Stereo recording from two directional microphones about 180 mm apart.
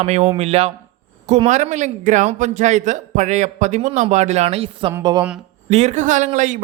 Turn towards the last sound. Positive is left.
turn(degrees=-45)  # may be behind; listen again after turning